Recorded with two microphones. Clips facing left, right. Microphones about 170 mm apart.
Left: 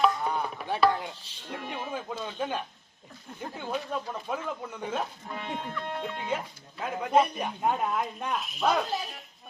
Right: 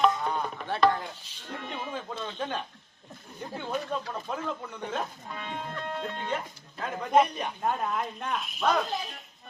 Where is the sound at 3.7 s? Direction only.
5° left (ahead or behind).